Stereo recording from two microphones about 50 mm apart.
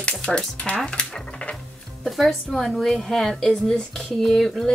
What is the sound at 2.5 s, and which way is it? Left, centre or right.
Speech, centre.